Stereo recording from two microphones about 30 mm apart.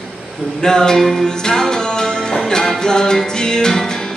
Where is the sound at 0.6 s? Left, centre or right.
Left.